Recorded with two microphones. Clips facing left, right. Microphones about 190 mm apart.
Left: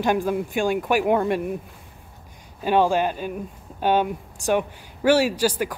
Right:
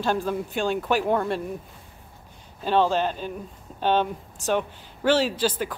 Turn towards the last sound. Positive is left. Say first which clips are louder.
# left 3 dB
turn(degrees=10)  # may be behind; listen again after turning